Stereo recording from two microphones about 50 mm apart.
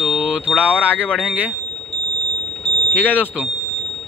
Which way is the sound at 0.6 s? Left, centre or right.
Right.